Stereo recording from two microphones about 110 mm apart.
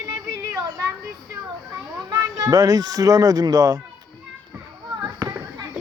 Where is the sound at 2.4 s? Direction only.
30° right (ahead or behind).